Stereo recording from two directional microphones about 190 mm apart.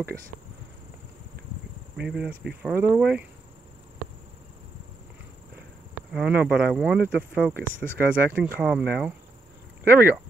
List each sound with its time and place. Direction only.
2.0 s speech: 5° right (ahead or behind)
6.1 s speech: 5° right (ahead or behind)
7.5 s speech: 45° right (ahead or behind)
8.1 s speech: 5° right (ahead or behind)